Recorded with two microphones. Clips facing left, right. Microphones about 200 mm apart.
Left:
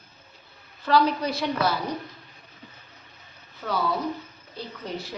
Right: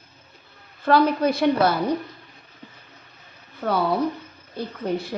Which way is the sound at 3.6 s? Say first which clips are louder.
Right 5 dB; 50° right (ahead or behind).